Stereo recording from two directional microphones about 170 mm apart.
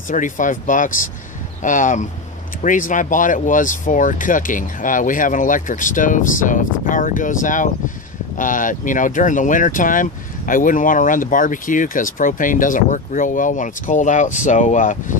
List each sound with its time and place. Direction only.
0.1 s speech: 50° left (ahead or behind)